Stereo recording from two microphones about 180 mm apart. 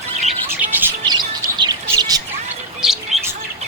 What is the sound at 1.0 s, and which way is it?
Bird, 25° right (ahead or behind).